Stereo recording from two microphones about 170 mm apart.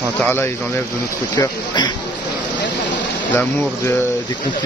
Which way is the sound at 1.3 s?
25° left (ahead or behind).